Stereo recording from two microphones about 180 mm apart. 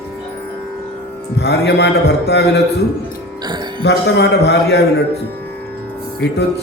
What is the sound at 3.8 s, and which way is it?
A man's voice, 75° left (ahead or behind).